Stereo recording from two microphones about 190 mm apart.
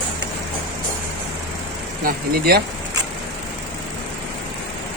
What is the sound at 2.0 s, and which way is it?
Speech, 50° right (ahead or behind).